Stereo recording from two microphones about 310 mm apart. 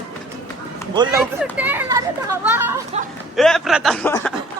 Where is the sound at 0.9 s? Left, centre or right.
Centre.